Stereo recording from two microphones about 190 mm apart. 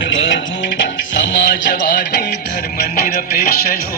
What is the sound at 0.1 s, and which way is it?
Music, 80° left.